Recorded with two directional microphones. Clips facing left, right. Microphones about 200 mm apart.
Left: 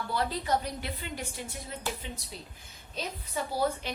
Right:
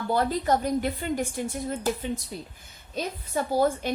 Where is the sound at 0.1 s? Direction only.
50° right (ahead or behind).